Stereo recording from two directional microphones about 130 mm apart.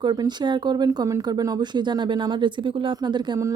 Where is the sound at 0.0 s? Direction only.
35° right (ahead or behind).